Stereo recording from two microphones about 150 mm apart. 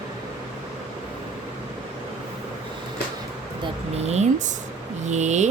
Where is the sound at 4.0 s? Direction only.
45° right (ahead or behind).